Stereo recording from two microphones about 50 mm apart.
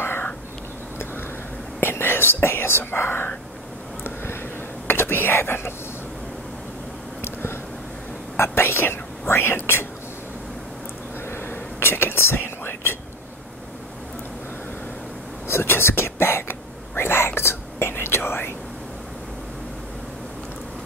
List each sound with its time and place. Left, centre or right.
0.0 s a sound: left
1.8 s speech: left
4.0 s whispering: left
7.2 s a sound: left
8.4 s speech: left
11.2 s whispering: left
15.4 s whispering: left